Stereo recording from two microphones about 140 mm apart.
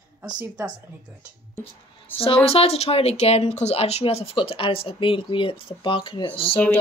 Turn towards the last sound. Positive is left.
turn(degrees=40)  # may be behind; listen again after turning